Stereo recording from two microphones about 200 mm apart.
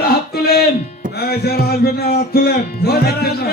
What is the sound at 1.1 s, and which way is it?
Music, 50° left (ahead or behind).